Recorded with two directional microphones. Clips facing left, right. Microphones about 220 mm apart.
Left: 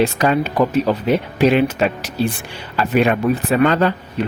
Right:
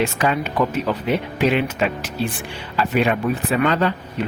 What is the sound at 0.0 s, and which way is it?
Speech, 35° left (ahead or behind).